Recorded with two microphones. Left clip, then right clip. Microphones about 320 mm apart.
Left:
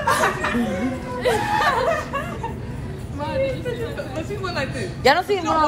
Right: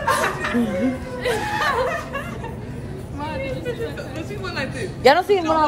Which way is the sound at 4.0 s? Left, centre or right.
Centre.